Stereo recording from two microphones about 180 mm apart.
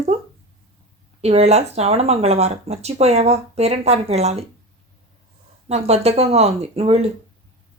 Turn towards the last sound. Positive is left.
turn(degrees=-35)  # may be behind; listen again after turning